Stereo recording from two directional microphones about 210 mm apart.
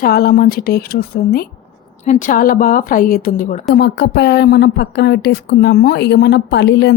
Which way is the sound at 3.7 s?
55° left (ahead or behind).